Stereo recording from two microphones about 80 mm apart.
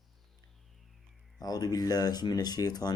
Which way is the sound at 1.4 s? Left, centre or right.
Left.